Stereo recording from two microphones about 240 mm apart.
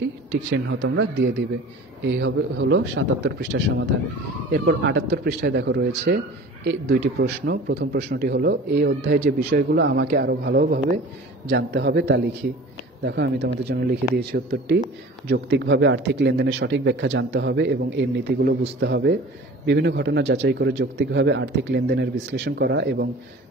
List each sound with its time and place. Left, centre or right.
0.5 s speech: right
11.4 s speech: right